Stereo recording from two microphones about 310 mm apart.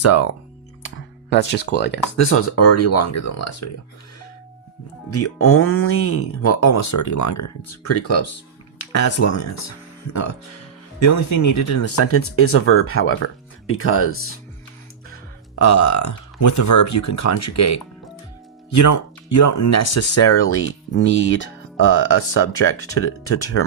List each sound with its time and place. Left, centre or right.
0.0 s speech: left
0.8 s music: left
2.1 s speech: left
5.1 s speech: left
15.1 s speech: left